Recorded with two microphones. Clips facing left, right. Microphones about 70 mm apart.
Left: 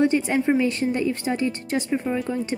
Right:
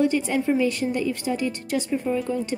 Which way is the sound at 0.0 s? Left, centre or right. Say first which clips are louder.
Left 2 dB; left.